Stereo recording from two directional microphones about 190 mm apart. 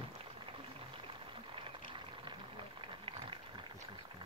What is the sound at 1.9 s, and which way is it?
Boiling, 25° right (ahead or behind).